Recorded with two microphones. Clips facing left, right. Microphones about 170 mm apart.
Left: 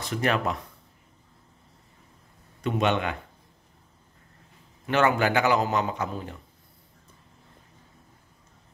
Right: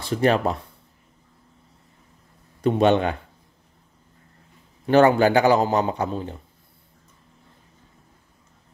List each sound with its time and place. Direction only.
0.0 s a man's voice: 30° right (ahead or behind)
2.6 s a man's voice: 35° right (ahead or behind)
4.8 s a man's voice: 35° right (ahead or behind)